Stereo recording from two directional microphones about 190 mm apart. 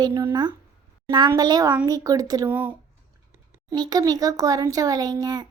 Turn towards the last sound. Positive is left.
turn(degrees=-20)  # may be behind; listen again after turning